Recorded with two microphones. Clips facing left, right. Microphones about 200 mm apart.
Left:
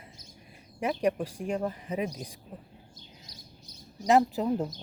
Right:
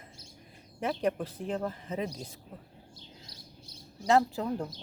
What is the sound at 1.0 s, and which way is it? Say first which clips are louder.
Speech: left 4 dB; 10° left (ahead or behind).